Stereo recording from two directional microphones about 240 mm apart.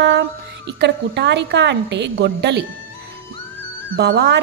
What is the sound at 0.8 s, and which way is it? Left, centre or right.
Speech, right.